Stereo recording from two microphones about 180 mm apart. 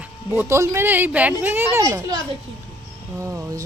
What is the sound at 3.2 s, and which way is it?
Speech, 15° right (ahead or behind).